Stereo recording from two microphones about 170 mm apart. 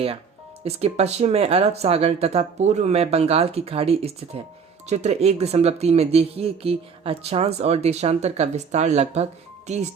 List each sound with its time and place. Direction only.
0.6 s speech: 40° right (ahead or behind)